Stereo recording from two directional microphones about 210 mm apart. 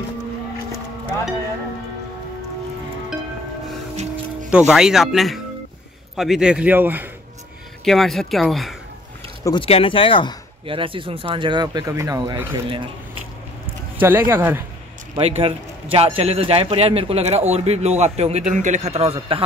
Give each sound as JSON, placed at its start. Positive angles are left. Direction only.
{"t": 3.9, "sound": "music", "side_deg": -30}
{"t": 4.5, "sound": "speech", "side_deg": -5}
{"t": 9.4, "sound": "speech", "side_deg": 20}
{"t": 10.7, "sound": "speech", "side_deg": -25}
{"t": 13.9, "sound": "speech", "side_deg": -10}
{"t": 15.1, "sound": "a man's voice", "side_deg": -30}